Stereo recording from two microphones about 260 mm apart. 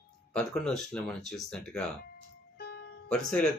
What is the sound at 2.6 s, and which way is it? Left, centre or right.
Music, left.